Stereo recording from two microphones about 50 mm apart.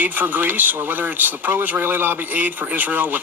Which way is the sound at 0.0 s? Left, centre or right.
Right.